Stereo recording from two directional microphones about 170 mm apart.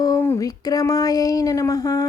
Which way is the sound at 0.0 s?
20° left (ahead or behind).